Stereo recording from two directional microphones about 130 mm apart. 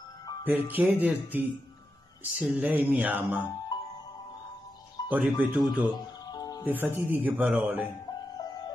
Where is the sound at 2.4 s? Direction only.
10° right (ahead or behind).